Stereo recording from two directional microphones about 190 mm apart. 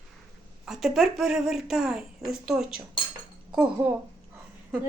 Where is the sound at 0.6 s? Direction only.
Centre (ahead or behind).